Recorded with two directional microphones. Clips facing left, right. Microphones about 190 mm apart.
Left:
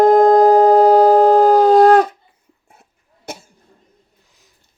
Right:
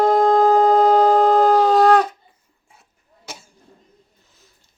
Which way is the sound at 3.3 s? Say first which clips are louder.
Left 7 dB; 55° left (ahead or behind).